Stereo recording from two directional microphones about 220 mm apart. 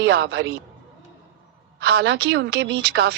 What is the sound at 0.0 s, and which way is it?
Speech, 50° right (ahead or behind).